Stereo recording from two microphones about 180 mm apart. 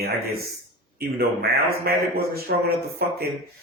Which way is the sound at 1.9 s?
60° right (ahead or behind).